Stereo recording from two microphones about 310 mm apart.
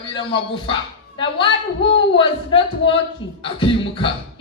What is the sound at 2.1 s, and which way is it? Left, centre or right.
Speech, centre.